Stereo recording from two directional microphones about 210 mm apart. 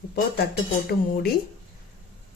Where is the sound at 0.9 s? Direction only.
45° left (ahead or behind).